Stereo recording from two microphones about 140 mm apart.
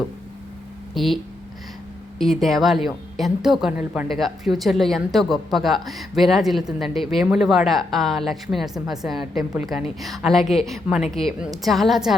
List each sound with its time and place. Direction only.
0.9 s speech: centre (ahead or behind)